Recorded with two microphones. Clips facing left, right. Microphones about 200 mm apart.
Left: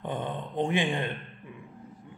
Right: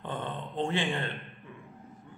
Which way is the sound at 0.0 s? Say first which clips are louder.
Left 3 dB; 15° left (ahead or behind).